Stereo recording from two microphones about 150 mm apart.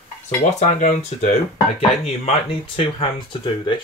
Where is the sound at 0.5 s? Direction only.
55° left (ahead or behind).